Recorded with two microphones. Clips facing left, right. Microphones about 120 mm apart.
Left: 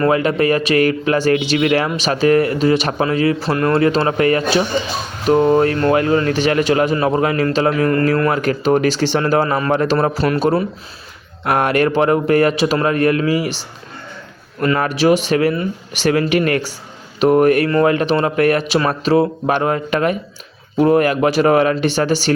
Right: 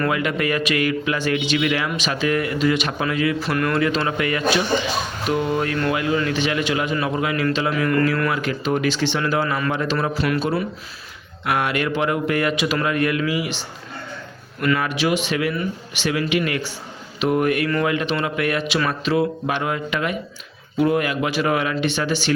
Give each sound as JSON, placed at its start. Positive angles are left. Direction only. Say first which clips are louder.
{"t": 0.0, "sound": "a man's voice", "louder": "left 7 dB", "side_deg": 35}
{"t": 14.6, "sound": "a man's voice", "louder": "left 5 dB", "side_deg": 40}